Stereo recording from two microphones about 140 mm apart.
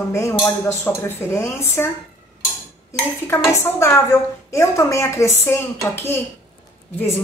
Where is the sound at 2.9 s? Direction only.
20° left (ahead or behind).